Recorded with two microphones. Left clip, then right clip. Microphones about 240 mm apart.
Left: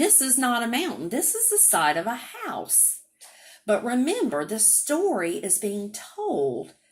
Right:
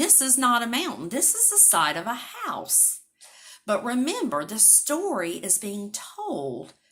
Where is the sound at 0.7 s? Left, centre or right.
Right.